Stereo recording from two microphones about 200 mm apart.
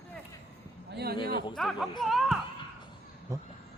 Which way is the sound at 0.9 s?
55° right (ahead or behind).